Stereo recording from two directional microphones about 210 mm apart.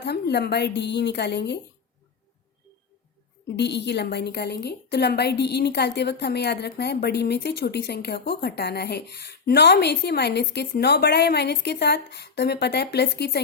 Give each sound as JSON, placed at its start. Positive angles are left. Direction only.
{"t": 0.0, "sound": "a woman's voice", "side_deg": 50}
{"t": 3.5, "sound": "a woman's voice", "side_deg": 55}